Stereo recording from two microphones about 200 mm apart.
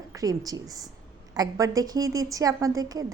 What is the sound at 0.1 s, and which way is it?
A woman's voice, 15° right (ahead or behind).